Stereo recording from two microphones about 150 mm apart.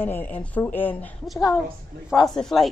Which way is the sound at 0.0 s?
15° left (ahead or behind).